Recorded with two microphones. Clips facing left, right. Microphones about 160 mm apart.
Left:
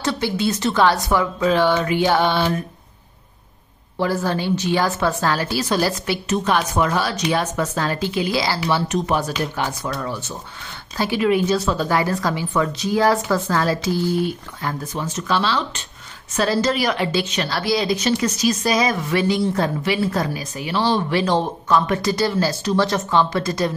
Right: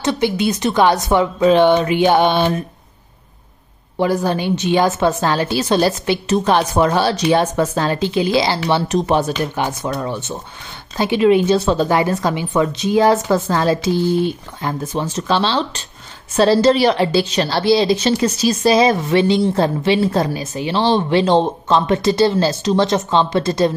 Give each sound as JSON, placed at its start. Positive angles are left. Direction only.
{"t": 0.0, "sound": "a woman's voice", "side_deg": -20}
{"t": 4.0, "sound": "a woman's voice", "side_deg": -20}
{"t": 6.3, "sound": "a woman's voice", "side_deg": -35}